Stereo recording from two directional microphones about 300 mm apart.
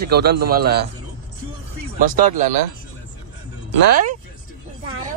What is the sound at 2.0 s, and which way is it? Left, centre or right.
Speech, right.